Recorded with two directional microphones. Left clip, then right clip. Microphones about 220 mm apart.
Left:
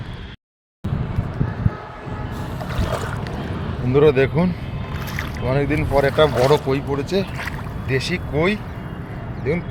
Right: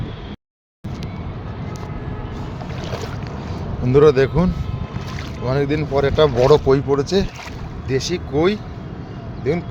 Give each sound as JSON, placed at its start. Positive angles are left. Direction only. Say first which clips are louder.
{"t": 3.8, "sound": "speech", "louder": "right 2 dB", "side_deg": -20}
{"t": 7.9, "sound": "speech", "louder": "right 1 dB", "side_deg": -15}